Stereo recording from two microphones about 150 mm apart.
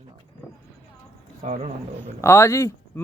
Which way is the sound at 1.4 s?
55° right (ahead or behind).